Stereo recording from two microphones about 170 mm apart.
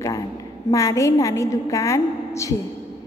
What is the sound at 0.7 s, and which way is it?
A woman's voice, 20° left (ahead or behind).